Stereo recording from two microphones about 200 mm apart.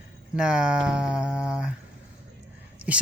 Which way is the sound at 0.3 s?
5° right (ahead or behind).